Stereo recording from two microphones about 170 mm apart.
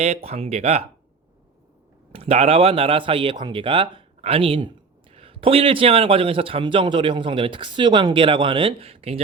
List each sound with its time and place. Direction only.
0.3 s a man's voice: 35° right (ahead or behind)
2.1 s a man's voice: 35° right (ahead or behind)